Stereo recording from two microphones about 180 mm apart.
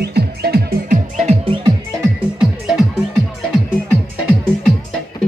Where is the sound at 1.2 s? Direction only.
35° right (ahead or behind).